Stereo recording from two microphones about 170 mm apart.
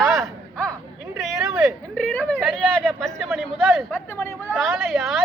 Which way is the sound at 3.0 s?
Centre (ahead or behind).